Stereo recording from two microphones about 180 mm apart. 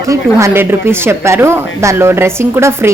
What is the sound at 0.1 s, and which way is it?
Speech, 15° right (ahead or behind).